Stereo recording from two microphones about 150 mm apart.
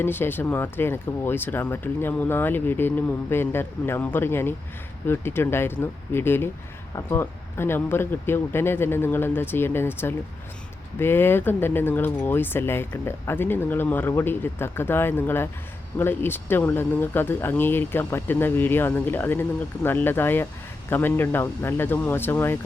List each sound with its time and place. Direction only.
0.0 s speech: 15° left (ahead or behind)